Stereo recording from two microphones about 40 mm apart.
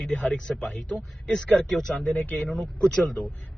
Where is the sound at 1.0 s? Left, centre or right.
Centre.